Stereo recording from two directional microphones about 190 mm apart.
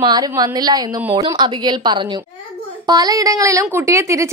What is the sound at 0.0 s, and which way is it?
A woman's voice, 20° right (ahead or behind).